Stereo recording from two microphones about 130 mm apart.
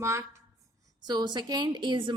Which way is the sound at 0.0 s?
20° right (ahead or behind).